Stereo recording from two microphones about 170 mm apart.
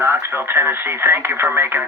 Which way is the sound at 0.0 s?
15° right (ahead or behind).